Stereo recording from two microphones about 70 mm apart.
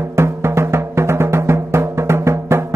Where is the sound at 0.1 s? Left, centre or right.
Right.